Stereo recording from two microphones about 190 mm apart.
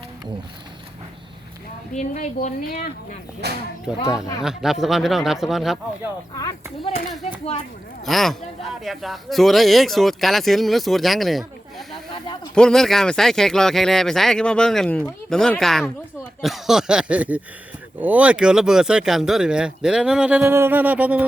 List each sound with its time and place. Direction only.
1.9 s a woman's voice: 40° left (ahead or behind)
3.4 s speech: 60° right (ahead or behind)
4.4 s speech: centre (ahead or behind)
7.1 s speech: centre (ahead or behind)
12.5 s speech: 5° left (ahead or behind)